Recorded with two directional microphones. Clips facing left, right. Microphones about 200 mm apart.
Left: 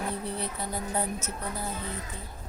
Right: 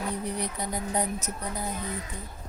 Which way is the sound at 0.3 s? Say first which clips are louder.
Right 2 dB; 15° right (ahead or behind).